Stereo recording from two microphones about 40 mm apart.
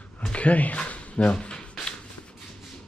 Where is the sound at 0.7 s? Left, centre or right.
Left.